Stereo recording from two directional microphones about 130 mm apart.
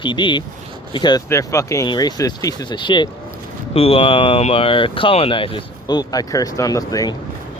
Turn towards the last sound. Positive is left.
turn(degrees=25)  # may be behind; listen again after turning